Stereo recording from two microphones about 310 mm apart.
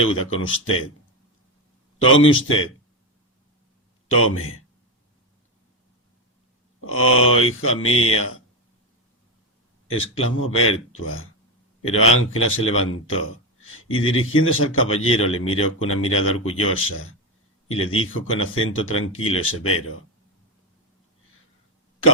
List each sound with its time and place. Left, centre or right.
0.0 s a man's voice: left
2.0 s a man's voice: left
4.1 s speech: left
6.8 s speech: left
9.8 s a man's voice: left